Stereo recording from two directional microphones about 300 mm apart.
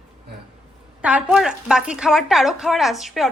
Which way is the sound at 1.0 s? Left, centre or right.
Centre.